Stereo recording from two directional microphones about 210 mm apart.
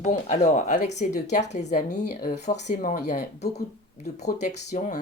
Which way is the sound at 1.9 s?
50° left (ahead or behind).